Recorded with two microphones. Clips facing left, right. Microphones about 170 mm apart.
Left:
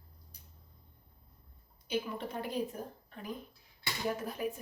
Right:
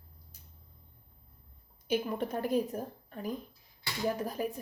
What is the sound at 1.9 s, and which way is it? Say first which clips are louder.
Speech: right 5 dB; 45° right (ahead or behind).